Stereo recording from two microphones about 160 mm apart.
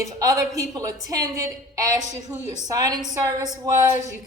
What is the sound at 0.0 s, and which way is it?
A woman's voice, 20° right (ahead or behind).